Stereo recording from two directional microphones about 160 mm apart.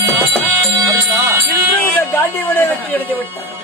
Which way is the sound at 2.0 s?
15° left (ahead or behind).